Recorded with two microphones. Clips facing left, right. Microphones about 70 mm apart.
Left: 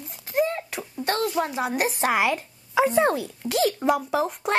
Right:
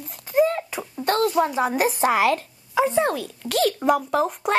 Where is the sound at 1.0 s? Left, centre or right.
Centre.